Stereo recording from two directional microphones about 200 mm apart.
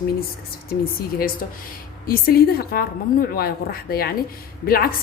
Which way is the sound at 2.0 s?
50° left (ahead or behind).